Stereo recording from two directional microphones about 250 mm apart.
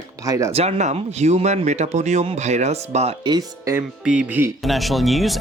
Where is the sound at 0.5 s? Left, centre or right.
Right.